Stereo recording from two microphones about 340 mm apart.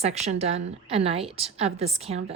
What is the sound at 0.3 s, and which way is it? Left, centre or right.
A woman's voice, centre.